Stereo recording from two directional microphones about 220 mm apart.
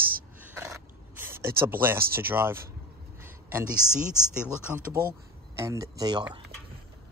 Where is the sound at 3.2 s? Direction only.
10° right (ahead or behind).